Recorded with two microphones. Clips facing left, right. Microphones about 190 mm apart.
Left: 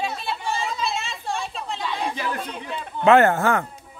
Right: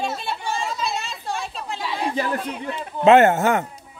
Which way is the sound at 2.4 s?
5° right (ahead or behind).